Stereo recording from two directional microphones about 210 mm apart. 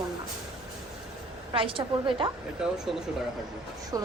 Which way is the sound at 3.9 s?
15° right (ahead or behind).